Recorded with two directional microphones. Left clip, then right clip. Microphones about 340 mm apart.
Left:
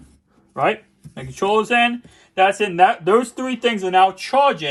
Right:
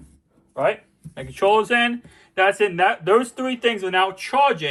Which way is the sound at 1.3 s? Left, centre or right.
Centre.